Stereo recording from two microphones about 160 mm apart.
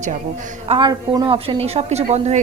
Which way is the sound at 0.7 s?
25° right (ahead or behind).